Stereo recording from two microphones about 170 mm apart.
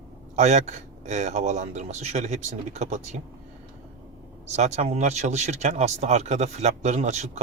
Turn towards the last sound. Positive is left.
turn(degrees=-40)  # may be behind; listen again after turning